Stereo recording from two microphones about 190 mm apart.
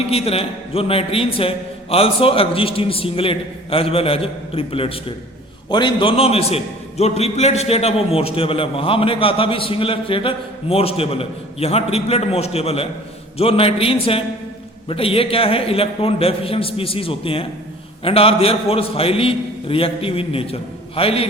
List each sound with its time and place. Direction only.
0.1 s a man's voice: 30° left (ahead or behind)